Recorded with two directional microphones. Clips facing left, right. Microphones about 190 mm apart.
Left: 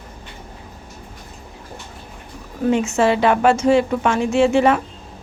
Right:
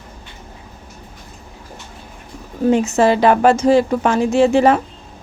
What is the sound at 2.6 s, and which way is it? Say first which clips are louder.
A woman's voice: right 3 dB; 35° right (ahead or behind).